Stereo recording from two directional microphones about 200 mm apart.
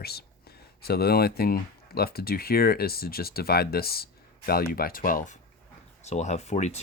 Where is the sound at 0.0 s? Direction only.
50° left (ahead or behind).